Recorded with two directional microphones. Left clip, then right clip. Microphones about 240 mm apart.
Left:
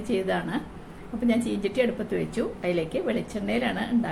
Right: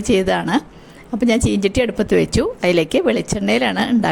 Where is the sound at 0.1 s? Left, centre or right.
Right.